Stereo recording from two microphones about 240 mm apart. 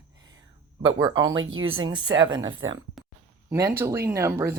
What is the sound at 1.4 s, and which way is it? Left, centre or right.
Speech, right.